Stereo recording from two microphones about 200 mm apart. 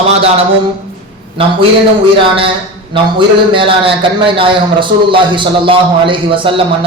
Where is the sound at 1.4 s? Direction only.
30° right (ahead or behind).